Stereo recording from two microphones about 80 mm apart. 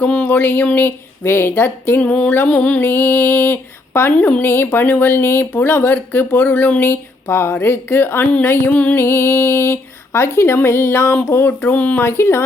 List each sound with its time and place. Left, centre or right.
0.0 s speech: centre
2.0 s a sound: centre
2.9 s speech: left
9.0 s speech: left
12.0 s speech: left